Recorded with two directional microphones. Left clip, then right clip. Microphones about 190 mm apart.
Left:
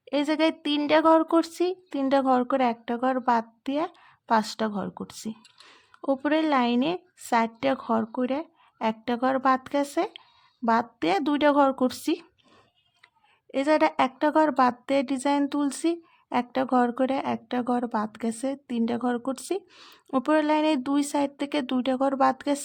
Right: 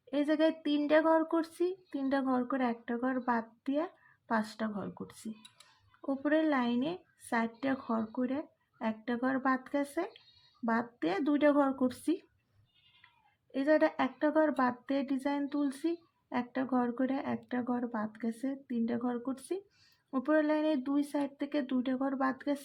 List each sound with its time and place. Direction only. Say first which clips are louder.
0.1 s a woman's voice: left 5 dB; 45° left (ahead or behind)
13.5 s a woman's voice: left 6 dB; 45° left (ahead or behind)